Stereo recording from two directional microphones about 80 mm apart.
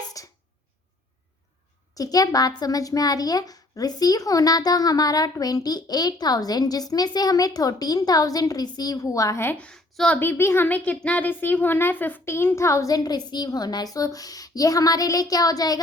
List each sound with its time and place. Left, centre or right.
0.2 s a sound: left
2.0 s speech: left
9.6 s a woman's voice: centre
10.2 s speech: left